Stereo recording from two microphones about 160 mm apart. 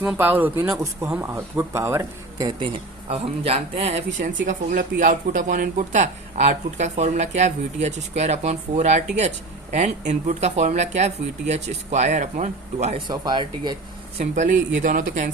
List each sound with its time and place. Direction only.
0.0 s speech: 10° right (ahead or behind)
3.1 s speech: 40° right (ahead or behind)
4.3 s speech: 60° right (ahead or behind)
13.1 s speech: 30° right (ahead or behind)
14.2 s speech: 50° right (ahead or behind)